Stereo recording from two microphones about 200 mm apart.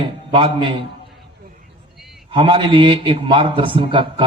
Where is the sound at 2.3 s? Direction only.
25° right (ahead or behind).